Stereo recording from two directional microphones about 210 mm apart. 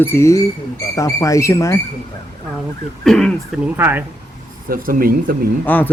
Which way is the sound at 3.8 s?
10° right (ahead or behind).